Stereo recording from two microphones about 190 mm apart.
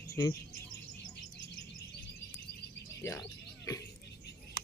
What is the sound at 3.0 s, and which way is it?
Speech, 15° left (ahead or behind).